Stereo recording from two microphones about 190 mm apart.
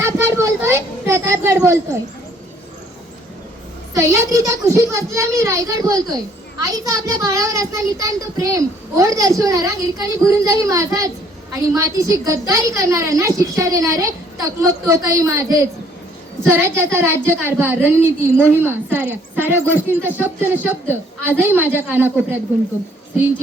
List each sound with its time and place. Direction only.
0.0 s a child's voice: 15° right (ahead or behind)
3.9 s a child's voice: 15° right (ahead or behind)